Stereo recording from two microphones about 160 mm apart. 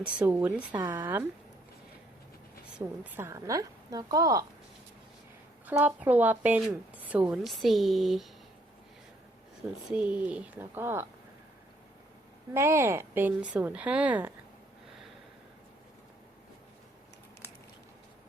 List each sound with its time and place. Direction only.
0.0 s a woman's voice: 10° right (ahead or behind)
0.7 s a woman's voice: 25° right (ahead or behind)
1.0 s a woman's voice: 10° right (ahead or behind)
2.7 s a woman's voice: 10° right (ahead or behind)
5.6 s a woman's voice: 10° right (ahead or behind)
9.9 s a woman's voice: 10° right (ahead or behind)
12.5 s a woman's voice: 15° right (ahead or behind)